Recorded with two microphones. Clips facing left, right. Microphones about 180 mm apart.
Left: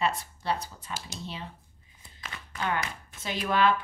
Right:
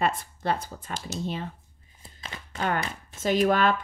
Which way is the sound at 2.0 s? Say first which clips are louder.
Right 2 dB; 30° right (ahead or behind).